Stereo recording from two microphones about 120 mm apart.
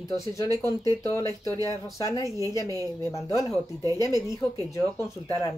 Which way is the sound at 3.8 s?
30° right (ahead or behind).